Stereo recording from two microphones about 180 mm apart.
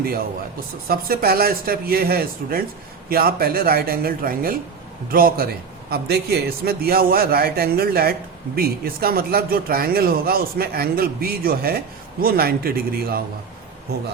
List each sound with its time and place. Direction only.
0.9 s a man's voice: 55° right (ahead or behind)